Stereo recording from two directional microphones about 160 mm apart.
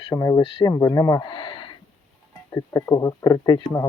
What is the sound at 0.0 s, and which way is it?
Speech, 25° left (ahead or behind).